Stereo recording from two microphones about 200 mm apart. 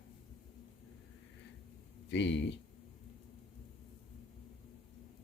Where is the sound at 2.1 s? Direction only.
65° left (ahead or behind).